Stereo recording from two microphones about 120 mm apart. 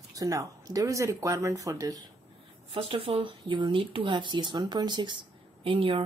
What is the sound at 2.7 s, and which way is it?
Speech, 55° right (ahead or behind).